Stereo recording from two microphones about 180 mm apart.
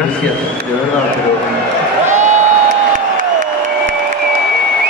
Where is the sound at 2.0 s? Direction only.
40° right (ahead or behind).